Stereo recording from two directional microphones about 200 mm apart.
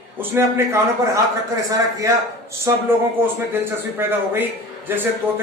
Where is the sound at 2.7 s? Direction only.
15° right (ahead or behind).